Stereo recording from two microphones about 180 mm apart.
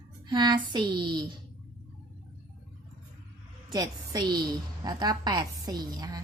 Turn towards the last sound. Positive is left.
turn(degrees=-20)  # may be behind; listen again after turning